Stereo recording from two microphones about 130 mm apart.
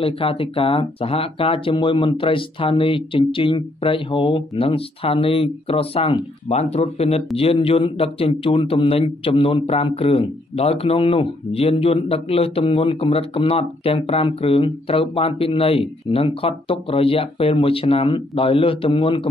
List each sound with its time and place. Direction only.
0.0 s a man's voice: 45° left (ahead or behind)